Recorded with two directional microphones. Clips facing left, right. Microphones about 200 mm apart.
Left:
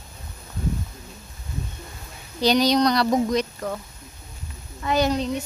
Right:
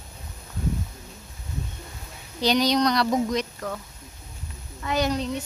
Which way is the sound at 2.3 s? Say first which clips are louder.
Left 3 dB; 35° left (ahead or behind).